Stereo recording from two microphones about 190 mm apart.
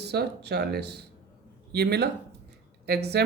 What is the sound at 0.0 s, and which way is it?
A woman's voice, 60° right (ahead or behind).